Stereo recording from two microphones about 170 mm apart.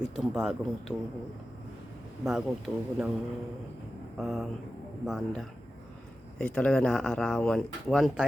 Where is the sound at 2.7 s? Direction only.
5° right (ahead or behind).